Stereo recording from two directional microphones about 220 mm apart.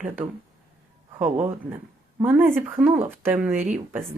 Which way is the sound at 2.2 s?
5° right (ahead or behind).